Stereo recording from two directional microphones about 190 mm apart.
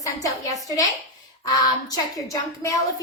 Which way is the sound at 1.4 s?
20° left (ahead or behind).